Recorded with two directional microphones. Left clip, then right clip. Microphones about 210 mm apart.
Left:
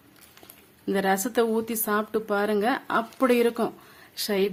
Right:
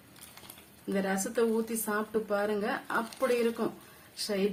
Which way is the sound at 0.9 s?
45° left (ahead or behind).